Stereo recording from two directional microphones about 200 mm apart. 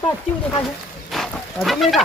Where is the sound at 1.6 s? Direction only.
Centre (ahead or behind).